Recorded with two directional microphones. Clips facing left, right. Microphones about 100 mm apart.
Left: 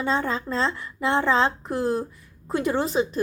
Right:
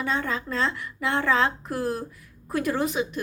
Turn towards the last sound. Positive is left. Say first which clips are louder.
# left 2 dB
turn(degrees=35)  # may be behind; listen again after turning